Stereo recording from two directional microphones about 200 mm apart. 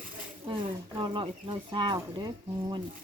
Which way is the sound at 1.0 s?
25° right (ahead or behind).